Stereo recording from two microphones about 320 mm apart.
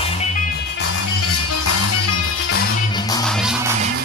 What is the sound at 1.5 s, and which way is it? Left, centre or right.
Music, left.